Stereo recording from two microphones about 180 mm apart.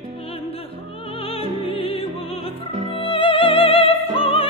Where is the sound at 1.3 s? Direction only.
30° left (ahead or behind).